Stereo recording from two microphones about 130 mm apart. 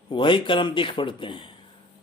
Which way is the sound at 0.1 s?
40° left (ahead or behind).